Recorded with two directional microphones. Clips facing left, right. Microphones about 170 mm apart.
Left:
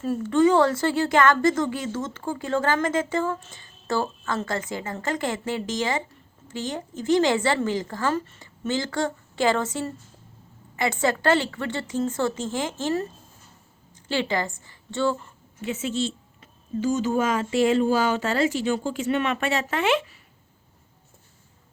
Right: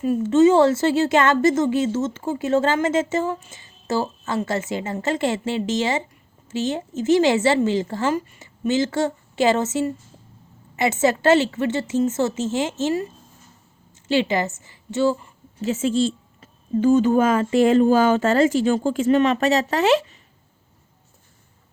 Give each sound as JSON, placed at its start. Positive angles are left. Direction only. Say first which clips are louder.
{"t": 0.0, "sound": "a woman's voice", "louder": "right 5 dB", "side_deg": -20}
{"t": 15.5, "sound": "a woman's voice", "louder": "right 6 dB", "side_deg": -30}
{"t": 15.8, "sound": "speech", "louder": "right 8 dB", "side_deg": -45}
{"t": 19.0, "sound": "speech", "louder": "right 8 dB", "side_deg": -35}